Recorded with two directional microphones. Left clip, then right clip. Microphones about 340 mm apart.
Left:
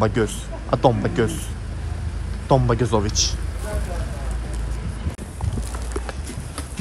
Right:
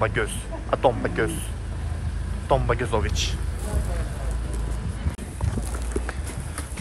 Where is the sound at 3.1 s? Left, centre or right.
Centre.